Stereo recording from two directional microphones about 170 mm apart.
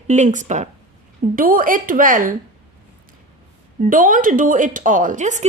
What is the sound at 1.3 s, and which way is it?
Speech, 55° right (ahead or behind).